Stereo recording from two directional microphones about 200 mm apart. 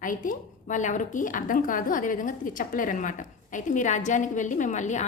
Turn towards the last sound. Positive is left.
turn(degrees=35)  # may be behind; listen again after turning